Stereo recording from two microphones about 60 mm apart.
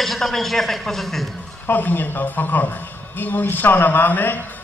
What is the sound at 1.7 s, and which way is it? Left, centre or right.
A man's voice, left.